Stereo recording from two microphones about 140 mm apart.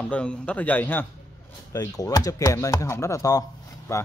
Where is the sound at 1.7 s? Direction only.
25° left (ahead or behind).